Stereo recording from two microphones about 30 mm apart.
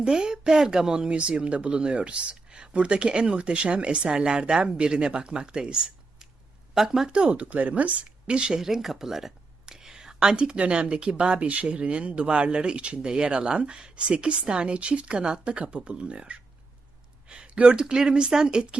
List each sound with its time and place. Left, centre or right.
0.2 s speech: right
1.5 s speech: right; by 7.1 s centre
7.3 s speech: right
8.3 s speech: right
8.5 s speech: centre
9.6 s whispering: centre
10.3 s speech: right
11.4 s speech: right
11.7 s speech: right
13.9 s speech: right
18.3 s speech: centre
18.7 s speech: right